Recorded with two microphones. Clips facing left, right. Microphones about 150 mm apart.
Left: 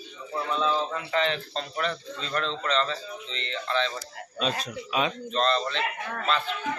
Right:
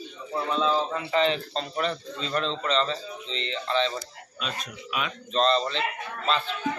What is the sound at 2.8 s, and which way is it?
Speech, 30° right (ahead or behind).